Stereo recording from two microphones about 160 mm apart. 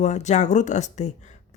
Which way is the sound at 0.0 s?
45° left (ahead or behind).